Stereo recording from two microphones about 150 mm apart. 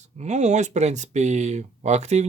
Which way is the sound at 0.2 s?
50° right (ahead or behind).